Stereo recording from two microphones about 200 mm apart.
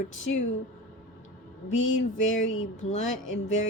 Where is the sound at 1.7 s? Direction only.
75° left (ahead or behind).